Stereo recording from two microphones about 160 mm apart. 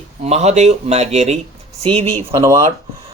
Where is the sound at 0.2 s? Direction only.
45° right (ahead or behind).